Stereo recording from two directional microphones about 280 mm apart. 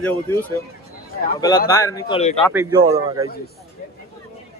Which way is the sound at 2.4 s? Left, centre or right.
Centre.